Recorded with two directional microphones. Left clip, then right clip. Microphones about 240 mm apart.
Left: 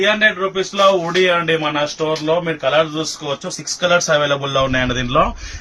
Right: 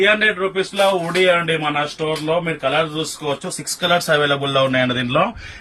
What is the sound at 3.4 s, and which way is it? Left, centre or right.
Speech, centre.